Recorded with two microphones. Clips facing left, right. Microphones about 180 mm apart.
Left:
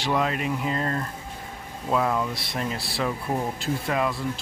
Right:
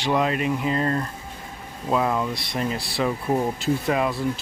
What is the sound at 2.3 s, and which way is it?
Speech, 5° left (ahead or behind).